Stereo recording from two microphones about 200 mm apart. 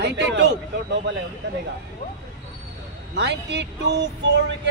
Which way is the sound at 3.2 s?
60° right (ahead or behind).